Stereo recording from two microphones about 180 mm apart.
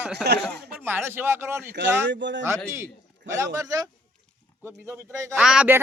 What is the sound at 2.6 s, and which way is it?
A man's voice, 15° right (ahead or behind).